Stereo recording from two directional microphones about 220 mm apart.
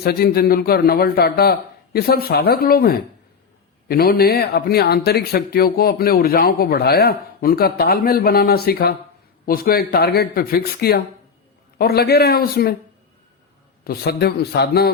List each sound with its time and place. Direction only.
0.0 s speech: 45° left (ahead or behind)
13.8 s speech: 45° left (ahead or behind)